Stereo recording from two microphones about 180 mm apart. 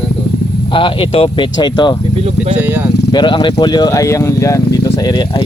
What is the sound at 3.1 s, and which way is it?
Speech, 25° left (ahead or behind).